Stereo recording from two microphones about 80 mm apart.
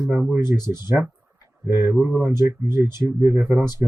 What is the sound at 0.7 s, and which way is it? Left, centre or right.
Speech, right.